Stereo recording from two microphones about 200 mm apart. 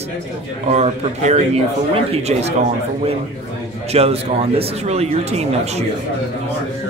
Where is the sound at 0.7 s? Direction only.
35° right (ahead or behind).